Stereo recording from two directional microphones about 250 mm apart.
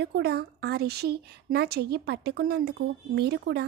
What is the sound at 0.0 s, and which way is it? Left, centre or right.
A woman's voice, right.